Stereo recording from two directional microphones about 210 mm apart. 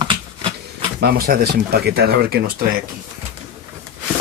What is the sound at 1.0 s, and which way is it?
Speech, 45° right (ahead or behind).